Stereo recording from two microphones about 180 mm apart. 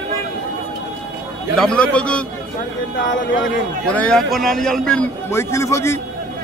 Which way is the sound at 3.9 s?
5° left (ahead or behind).